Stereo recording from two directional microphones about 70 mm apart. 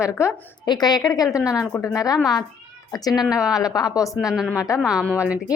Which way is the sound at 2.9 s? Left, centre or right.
Left.